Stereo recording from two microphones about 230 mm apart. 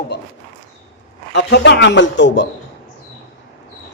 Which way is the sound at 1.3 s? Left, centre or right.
Left.